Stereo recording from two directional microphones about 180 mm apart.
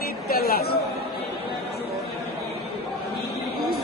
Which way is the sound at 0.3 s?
60° left (ahead or behind).